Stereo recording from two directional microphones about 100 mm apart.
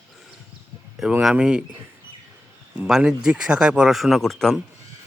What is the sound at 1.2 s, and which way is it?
Speech, 5° right (ahead or behind).